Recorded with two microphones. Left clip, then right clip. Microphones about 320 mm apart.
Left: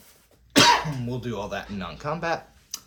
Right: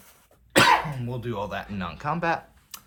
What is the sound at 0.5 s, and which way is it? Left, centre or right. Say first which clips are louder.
Cough: left 1 dB; right.